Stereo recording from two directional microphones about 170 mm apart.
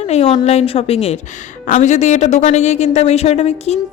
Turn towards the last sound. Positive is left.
turn(degrees=40)  # may be behind; listen again after turning